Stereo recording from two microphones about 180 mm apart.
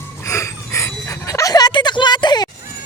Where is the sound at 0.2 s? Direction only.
15° left (ahead or behind).